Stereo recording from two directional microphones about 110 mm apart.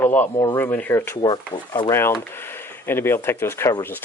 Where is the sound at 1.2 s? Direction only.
40° left (ahead or behind).